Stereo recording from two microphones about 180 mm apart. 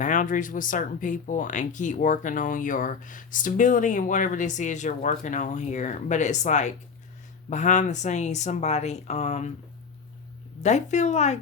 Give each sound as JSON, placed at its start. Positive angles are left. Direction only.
{"t": 0.0, "sound": "speech", "side_deg": 45}
{"t": 10.6, "sound": "speech", "side_deg": 40}